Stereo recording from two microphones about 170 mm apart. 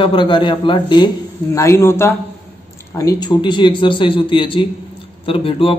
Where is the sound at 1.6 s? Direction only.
15° left (ahead or behind).